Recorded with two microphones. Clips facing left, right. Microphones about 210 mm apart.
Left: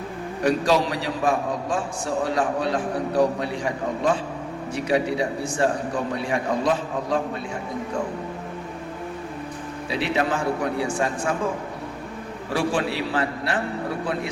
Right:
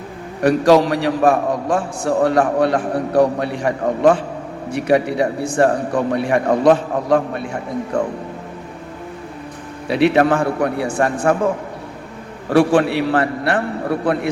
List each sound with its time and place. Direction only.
0.4 s a man's voice: 65° right (ahead or behind)
9.9 s a man's voice: 65° right (ahead or behind)
12.5 s a man's voice: 65° right (ahead or behind)